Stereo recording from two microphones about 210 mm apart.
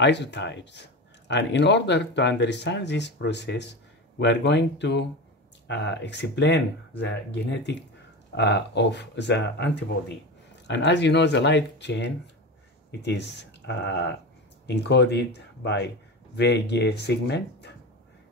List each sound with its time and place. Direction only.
0.0 s speech: 55° left (ahead or behind)
8.4 s speech: 55° left (ahead or behind)
10.7 s speech: 55° left (ahead or behind)